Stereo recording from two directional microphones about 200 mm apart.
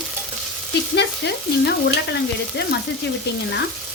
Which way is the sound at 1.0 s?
55° left (ahead or behind).